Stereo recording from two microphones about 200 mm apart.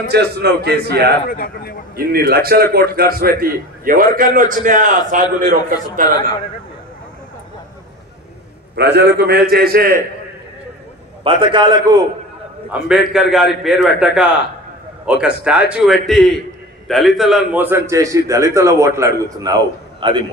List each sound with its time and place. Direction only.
0.1 s a man's voice: 55° right (ahead or behind)
1.2 s speech: 45° left (ahead or behind)
2.0 s a man's voice: 50° right (ahead or behind)
8.7 s a man's voice: 55° right (ahead or behind)
11.2 s a man's voice: 25° right (ahead or behind)
12.7 s a man's voice: 5° right (ahead or behind); by 20.2 s 25° right (ahead or behind)